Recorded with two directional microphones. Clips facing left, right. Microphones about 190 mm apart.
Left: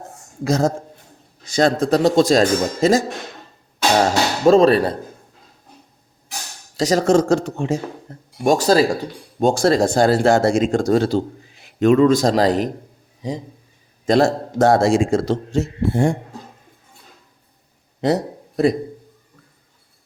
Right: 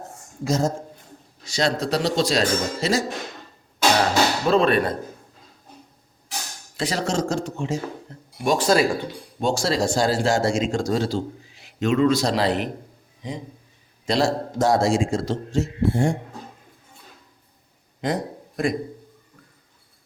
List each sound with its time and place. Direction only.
0.4 s a man's voice: 65° left (ahead or behind)
1.5 s speech: 50° left (ahead or behind)
4.4 s speech: 40° left (ahead or behind)
6.7 s a man's voice: 45° left (ahead or behind); by 7.8 s 65° left (ahead or behind)
8.1 s speech: 50° left (ahead or behind)
8.4 s speech: 40° left (ahead or behind)
14.1 s a man's voice: 55° left (ahead or behind)
18.0 s a sound: 35° left (ahead or behind)